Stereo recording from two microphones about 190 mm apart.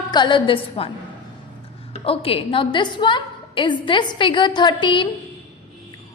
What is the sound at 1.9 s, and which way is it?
A woman's voice, 30° left (ahead or behind).